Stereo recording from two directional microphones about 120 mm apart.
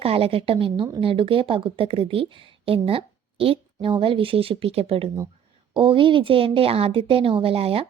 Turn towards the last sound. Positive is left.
turn(degrees=-50)  # may be behind; listen again after turning